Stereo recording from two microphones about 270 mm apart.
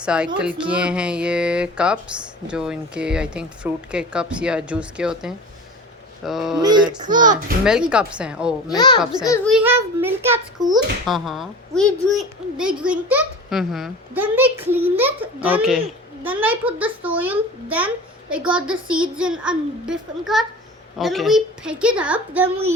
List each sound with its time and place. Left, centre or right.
0.0 s a child's voice: centre
6.6 s a sound: centre
7.6 s a child's voice: centre
8.7 s a child's voice: centre
9.5 s a child's voice: centre